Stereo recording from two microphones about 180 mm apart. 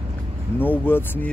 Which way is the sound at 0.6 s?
10° left (ahead or behind).